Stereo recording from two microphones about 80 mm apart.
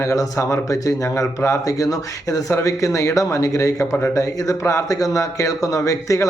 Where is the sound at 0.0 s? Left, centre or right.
Left.